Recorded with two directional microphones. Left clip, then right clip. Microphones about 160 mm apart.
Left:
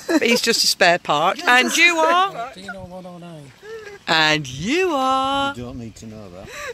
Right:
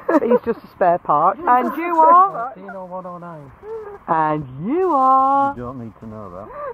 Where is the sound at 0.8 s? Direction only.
25° left (ahead or behind).